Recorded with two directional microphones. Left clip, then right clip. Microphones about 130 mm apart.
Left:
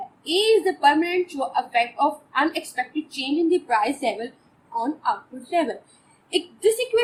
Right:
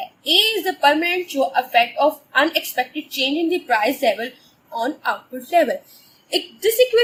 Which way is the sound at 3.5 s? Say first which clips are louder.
Right 2 dB; 90° right.